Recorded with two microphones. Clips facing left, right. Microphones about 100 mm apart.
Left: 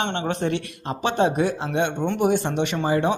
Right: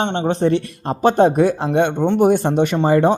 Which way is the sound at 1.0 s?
45° right (ahead or behind).